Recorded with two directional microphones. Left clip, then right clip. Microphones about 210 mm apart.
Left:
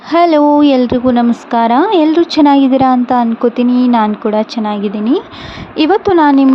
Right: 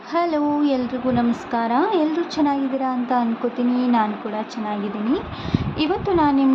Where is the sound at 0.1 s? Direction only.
35° left (ahead or behind).